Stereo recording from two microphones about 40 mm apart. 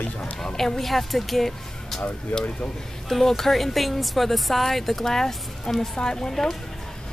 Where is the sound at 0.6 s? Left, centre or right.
Centre.